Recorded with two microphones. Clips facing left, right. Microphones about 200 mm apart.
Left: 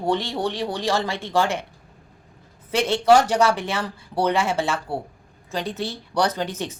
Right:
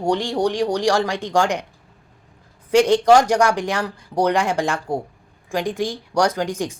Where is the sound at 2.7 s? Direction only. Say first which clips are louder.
Right 4 dB; 15° right (ahead or behind).